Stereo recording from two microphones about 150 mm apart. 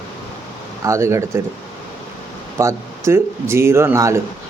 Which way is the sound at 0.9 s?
20° right (ahead or behind).